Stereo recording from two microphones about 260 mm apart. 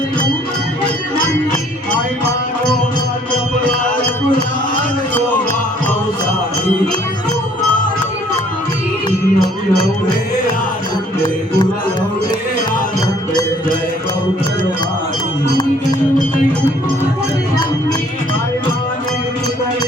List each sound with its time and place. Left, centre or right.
9.0 s music: centre